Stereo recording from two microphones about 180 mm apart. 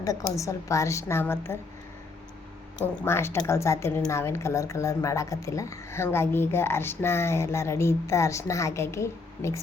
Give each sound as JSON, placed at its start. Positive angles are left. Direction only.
{"t": 0.0, "sound": "speech", "side_deg": 20}
{"t": 2.8, "sound": "speech", "side_deg": 10}